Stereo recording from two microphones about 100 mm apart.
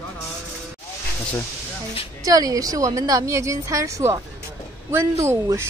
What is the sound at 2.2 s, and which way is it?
A woman's voice, 35° right (ahead or behind).